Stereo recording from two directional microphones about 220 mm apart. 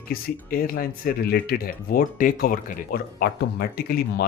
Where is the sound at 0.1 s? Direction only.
40° left (ahead or behind).